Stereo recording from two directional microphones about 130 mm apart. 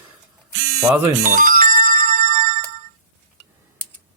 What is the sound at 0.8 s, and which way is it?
Speech, 20° right (ahead or behind).